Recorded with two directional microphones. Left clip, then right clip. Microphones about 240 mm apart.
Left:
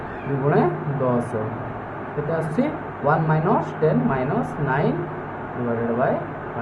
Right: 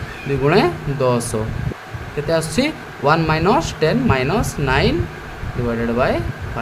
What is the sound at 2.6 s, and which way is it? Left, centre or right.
Speech, right.